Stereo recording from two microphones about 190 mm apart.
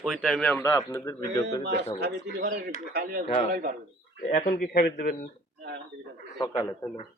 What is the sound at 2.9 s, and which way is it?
Speech, 55° right (ahead or behind).